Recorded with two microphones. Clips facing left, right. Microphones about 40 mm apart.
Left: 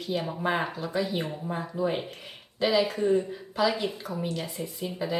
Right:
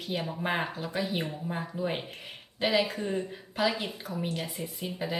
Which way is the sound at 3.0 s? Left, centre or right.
Centre.